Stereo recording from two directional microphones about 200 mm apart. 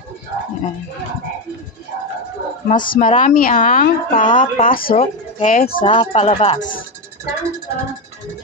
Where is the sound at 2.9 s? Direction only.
40° left (ahead or behind).